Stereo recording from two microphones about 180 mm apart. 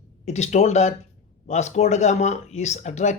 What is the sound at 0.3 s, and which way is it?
Speech, 40° left (ahead or behind).